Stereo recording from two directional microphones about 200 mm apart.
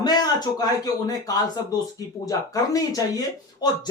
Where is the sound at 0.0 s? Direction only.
20° left (ahead or behind).